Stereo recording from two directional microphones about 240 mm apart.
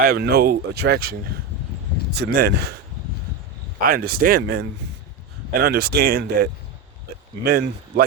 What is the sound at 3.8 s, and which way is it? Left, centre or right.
Speech, right.